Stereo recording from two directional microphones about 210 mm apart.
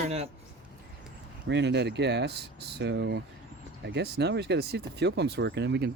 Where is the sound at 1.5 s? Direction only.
55° right (ahead or behind).